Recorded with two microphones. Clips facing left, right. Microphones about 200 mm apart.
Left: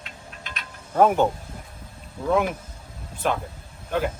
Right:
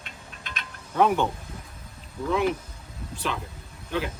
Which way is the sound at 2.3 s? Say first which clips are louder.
Left 2 dB; 50° left (ahead or behind).